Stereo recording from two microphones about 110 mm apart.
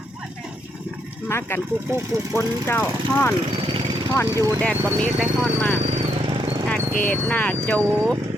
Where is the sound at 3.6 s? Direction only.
50° right (ahead or behind).